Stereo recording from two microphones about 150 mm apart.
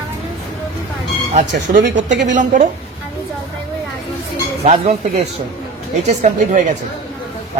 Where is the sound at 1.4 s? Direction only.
65° right (ahead or behind).